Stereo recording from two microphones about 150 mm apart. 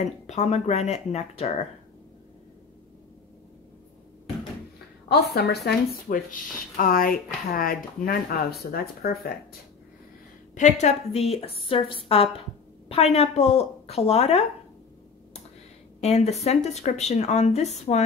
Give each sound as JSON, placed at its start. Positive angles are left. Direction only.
{"t": 0.3, "sound": "a woman's voice", "side_deg": 45}
{"t": 5.0, "sound": "a woman's voice", "side_deg": 90}
{"t": 6.8, "sound": "speech", "side_deg": 70}
{"t": 10.5, "sound": "a woman's voice", "side_deg": 50}
{"t": 16.0, "sound": "a woman's voice", "side_deg": 45}